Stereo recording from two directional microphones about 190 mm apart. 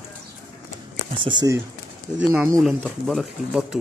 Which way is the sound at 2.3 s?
10° right (ahead or behind).